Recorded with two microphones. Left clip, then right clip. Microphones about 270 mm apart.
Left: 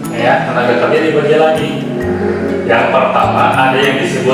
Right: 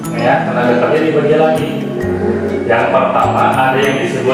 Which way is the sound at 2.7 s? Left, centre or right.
Centre.